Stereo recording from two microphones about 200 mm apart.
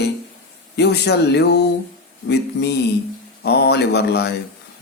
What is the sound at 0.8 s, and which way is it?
A man's voice, 55° left (ahead or behind).